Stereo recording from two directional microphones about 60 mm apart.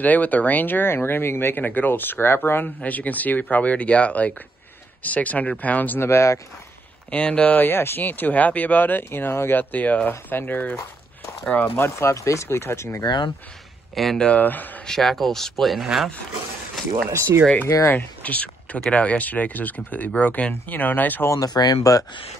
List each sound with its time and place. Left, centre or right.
0.0 s speech: left
2.8 s speech: left
5.9 s speech: left
7.1 s speech: left
11.6 s speech: left
13.9 s speech: centre
14.4 s speech: left
14.9 s speech: centre
17.1 s speech: right
17.9 s speech: left
21.3 s speech: left